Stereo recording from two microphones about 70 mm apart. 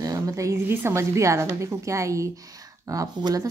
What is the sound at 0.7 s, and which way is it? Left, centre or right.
A woman's voice, right.